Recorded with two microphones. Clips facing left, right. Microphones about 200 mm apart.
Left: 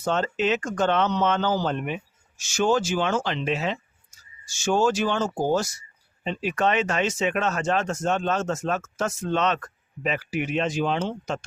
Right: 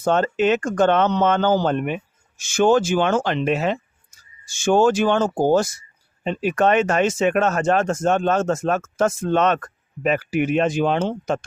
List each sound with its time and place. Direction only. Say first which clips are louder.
0.0 s speech: right 6 dB; 55° right (ahead or behind)